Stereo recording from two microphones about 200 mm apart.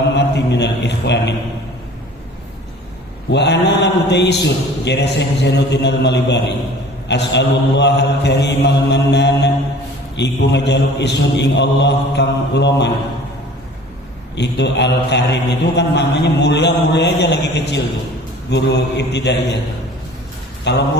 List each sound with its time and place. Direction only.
0.2 s mantra: 60° left (ahead or behind)
3.3 s mantra: 60° left (ahead or behind)
14.3 s mantra: 60° left (ahead or behind)
20.7 s mantra: 60° left (ahead or behind)